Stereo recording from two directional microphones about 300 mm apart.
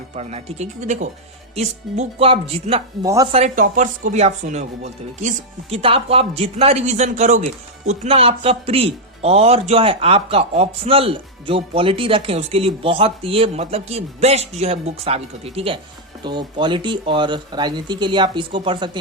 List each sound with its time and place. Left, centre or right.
0.2 s a man's voice: right